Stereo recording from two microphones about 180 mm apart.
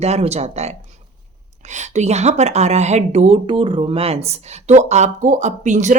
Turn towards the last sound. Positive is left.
turn(degrees=-40)  # may be behind; listen again after turning